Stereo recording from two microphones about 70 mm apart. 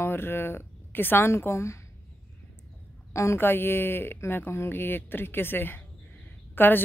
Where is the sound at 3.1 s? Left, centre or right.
Left.